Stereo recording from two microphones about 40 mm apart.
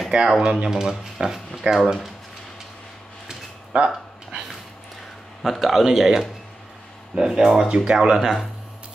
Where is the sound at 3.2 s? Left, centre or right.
Right.